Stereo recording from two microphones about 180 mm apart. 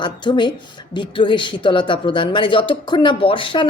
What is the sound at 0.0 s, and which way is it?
Speech, 25° left (ahead or behind).